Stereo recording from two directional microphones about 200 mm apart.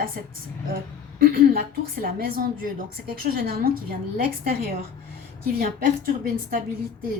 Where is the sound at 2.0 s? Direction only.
45° right (ahead or behind).